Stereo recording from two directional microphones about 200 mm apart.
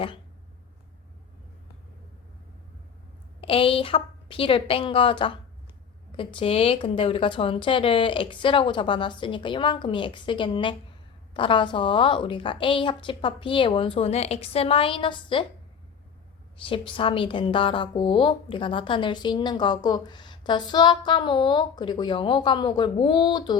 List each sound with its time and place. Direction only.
3.4 s a woman's voice: 25° left (ahead or behind)
16.6 s a woman's voice: 25° left (ahead or behind)